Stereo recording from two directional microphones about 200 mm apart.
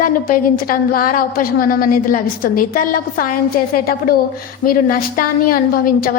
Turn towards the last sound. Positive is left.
turn(degrees=45)  # may be behind; listen again after turning